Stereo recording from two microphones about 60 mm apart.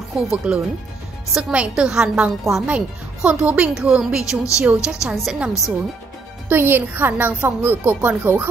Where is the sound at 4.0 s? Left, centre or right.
Centre.